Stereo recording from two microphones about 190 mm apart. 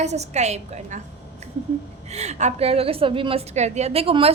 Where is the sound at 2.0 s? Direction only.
35° right (ahead or behind).